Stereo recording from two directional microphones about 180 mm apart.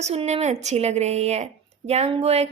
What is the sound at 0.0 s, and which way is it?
A woman's voice, 35° right (ahead or behind).